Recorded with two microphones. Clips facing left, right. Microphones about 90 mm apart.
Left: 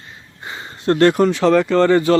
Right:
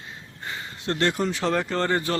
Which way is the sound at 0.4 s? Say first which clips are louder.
Left 3 dB; 25° left (ahead or behind).